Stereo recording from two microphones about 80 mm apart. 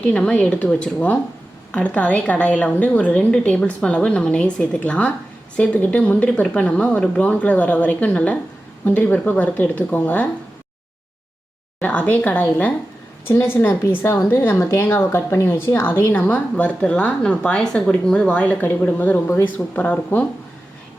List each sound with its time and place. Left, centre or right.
0.0 s a woman's voice: centre
11.8 s speech: centre
13.2 s a woman's voice: left